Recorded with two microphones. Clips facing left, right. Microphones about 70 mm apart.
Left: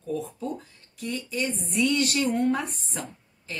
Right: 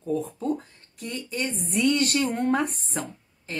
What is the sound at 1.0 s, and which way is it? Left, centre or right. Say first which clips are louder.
Speech: left 1 dB; right.